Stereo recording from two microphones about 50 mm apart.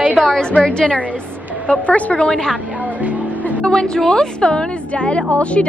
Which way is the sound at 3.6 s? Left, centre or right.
Centre.